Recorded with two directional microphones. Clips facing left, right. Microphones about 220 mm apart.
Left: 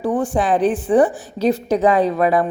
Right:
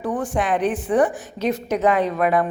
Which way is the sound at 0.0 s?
30° left (ahead or behind).